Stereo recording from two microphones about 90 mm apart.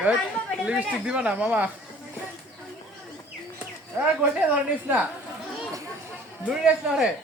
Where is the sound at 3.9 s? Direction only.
15° right (ahead or behind).